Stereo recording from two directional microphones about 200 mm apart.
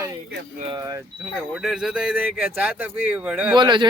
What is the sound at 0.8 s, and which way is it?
Speech, 15° right (ahead or behind).